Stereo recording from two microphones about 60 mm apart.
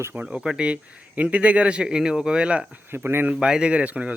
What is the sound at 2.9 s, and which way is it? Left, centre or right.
Speech, right.